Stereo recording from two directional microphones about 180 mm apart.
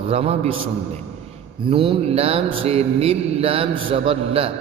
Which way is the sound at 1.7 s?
30° right (ahead or behind).